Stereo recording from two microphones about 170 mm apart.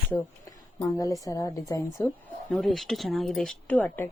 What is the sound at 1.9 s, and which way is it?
A woman's voice, 5° left (ahead or behind).